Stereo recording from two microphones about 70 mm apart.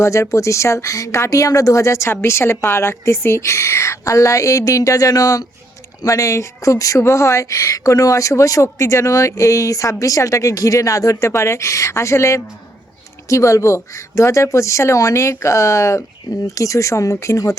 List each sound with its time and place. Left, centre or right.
0.0 s speech: left